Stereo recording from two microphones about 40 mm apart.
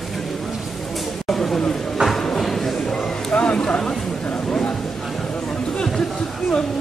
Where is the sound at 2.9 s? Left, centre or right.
Left.